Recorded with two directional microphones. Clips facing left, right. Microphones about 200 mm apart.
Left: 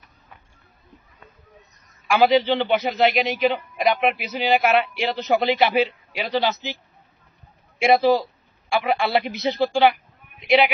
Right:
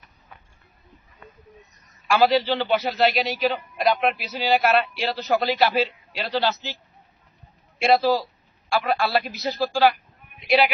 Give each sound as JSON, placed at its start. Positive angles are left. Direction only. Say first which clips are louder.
{"t": 2.0, "sound": "a man's voice", "louder": "left 2 dB", "side_deg": 15}
{"t": 7.8, "sound": "a man's voice", "louder": "left 2 dB", "side_deg": 15}